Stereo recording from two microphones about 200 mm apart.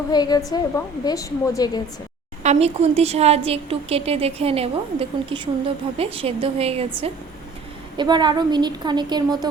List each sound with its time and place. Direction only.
0.1 s a woman's voice: 20° left (ahead or behind)
2.4 s a woman's voice: 35° right (ahead or behind)